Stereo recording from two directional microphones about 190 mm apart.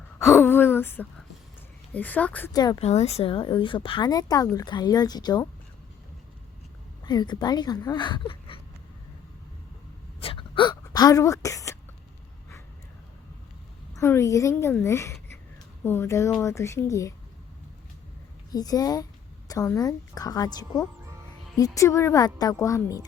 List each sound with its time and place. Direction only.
0.3 s a woman's voice: 10° left (ahead or behind)
2.5 s speech: 20° left (ahead or behind)
2.8 s speech: 35° left (ahead or behind)
7.0 s speech: 20° left (ahead or behind)
10.2 s gasp: 30° left (ahead or behind)
13.9 s a woman's voice: 15° left (ahead or behind)
18.5 s a woman's voice: 20° left (ahead or behind)